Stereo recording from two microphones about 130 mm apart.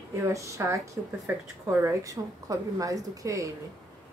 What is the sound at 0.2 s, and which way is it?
A woman's voice, 25° right (ahead or behind).